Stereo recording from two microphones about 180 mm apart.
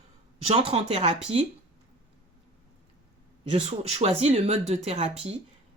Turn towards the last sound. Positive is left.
turn(degrees=-35)  # may be behind; listen again after turning